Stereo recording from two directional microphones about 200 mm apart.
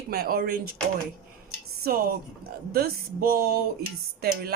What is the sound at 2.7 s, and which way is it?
Speech, 50° right (ahead or behind).